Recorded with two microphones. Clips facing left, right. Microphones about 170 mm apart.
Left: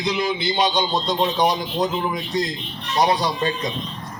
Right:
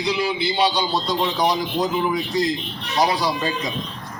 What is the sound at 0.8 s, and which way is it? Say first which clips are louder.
Speech: left 1 dB; 10° right (ahead or behind).